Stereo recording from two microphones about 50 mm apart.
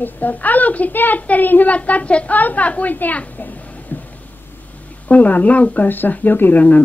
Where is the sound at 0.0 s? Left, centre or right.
Left.